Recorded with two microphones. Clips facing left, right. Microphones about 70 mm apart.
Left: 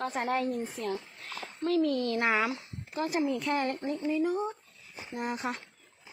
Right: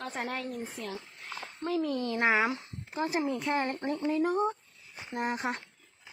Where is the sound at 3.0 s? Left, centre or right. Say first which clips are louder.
Left 1 dB; right.